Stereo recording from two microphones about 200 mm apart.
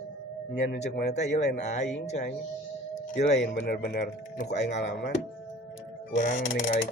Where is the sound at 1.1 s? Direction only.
35° left (ahead or behind).